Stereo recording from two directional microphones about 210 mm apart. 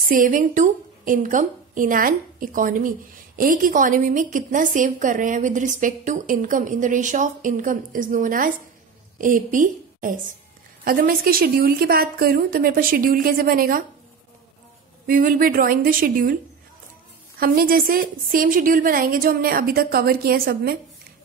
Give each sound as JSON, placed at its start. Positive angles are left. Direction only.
{"t": 0.1, "sound": "a woman's voice", "side_deg": -40}
{"t": 15.0, "sound": "a woman's voice", "side_deg": -40}
{"t": 17.4, "sound": "a woman's voice", "side_deg": -45}